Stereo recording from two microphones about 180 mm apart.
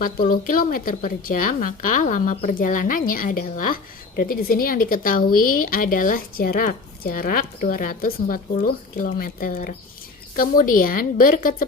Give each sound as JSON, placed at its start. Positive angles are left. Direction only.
{"t": 0.0, "sound": "a woman's voice", "side_deg": 50}